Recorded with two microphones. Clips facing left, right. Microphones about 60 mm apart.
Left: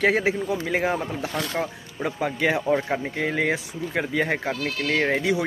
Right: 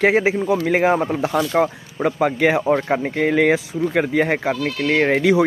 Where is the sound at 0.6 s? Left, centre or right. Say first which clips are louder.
Right 7 dB; right.